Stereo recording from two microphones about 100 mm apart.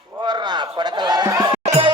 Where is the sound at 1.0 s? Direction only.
45° right (ahead or behind).